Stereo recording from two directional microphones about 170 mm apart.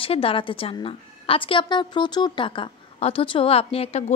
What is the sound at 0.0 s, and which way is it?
A woman's voice, 35° left (ahead or behind).